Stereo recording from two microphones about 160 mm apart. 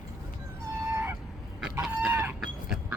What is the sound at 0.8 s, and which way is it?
Honk, 15° right (ahead or behind).